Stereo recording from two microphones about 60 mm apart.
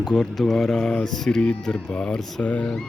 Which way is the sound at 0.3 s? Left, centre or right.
Centre.